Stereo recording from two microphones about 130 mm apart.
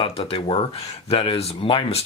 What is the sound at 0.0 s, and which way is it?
Speech, 45° left (ahead or behind).